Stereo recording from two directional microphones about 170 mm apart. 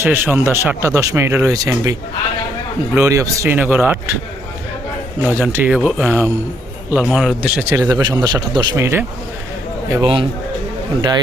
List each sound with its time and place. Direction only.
0.0 s speech: 10° right (ahead or behind)
5.4 s a man's voice: 10° right (ahead or behind)
7.7 s speech: 20° right (ahead or behind)
10.0 s a man's voice: 30° right (ahead or behind)